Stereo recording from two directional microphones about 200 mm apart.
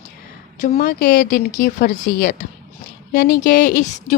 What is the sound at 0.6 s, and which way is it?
A woman's voice, 45° left (ahead or behind).